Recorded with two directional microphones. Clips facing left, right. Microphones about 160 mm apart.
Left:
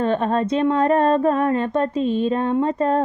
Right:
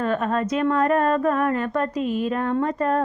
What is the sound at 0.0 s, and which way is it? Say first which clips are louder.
Speech: left 3 dB; 30° left (ahead or behind).